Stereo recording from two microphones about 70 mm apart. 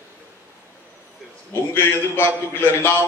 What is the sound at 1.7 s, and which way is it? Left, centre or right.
A man's voice, left.